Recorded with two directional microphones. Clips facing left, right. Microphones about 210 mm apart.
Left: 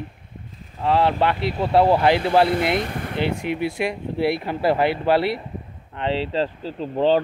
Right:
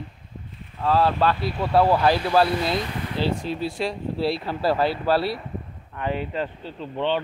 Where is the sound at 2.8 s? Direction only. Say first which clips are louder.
Left 2 dB; 50° left (ahead or behind).